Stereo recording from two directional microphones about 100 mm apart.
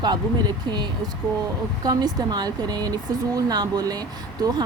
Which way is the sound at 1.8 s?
45° right (ahead or behind).